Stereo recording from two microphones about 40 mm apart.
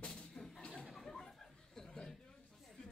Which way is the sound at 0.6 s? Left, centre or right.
Left.